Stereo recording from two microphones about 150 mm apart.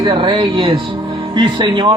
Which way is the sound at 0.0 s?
30° right (ahead or behind).